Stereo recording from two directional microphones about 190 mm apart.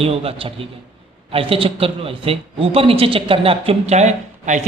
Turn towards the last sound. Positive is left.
turn(degrees=-40)  # may be behind; listen again after turning